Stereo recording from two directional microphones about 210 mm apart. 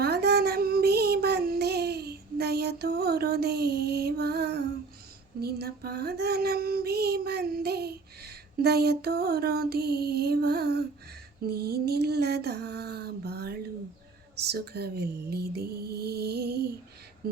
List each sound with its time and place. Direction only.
0.0 s child singing: 50° right (ahead or behind)
5.4 s female singing: 50° right (ahead or behind)
11.4 s a sound: 50° right (ahead or behind)